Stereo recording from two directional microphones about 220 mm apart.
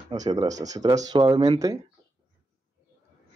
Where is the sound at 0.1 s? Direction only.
15° right (ahead or behind).